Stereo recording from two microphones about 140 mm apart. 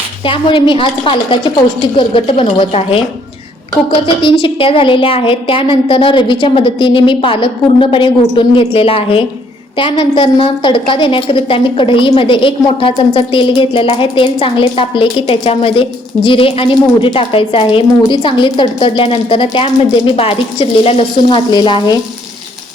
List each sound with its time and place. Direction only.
0.3 s a woman's voice: 35° left (ahead or behind)